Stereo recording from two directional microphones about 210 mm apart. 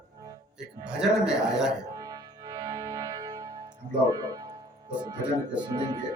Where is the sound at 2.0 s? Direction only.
15° right (ahead or behind).